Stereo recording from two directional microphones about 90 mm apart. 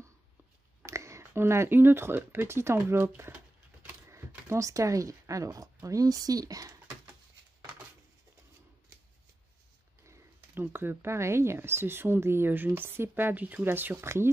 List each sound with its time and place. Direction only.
0.8 s speech: 35° right (ahead or behind)
4.3 s speech: 35° right (ahead or behind)
10.0 s speech: 30° right (ahead or behind)